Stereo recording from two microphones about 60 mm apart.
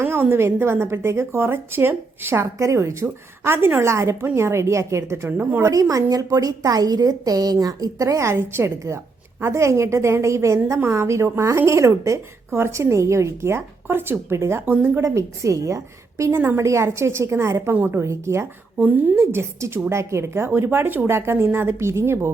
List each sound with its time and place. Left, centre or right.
0.0 s a woman's voice: right
2.6 s a woman's voice: right
5.7 s a woman's voice: right
14.6 s speech: right
15.0 s a woman's voice: right
18.8 s speech: right
19.1 s a woman's voice: right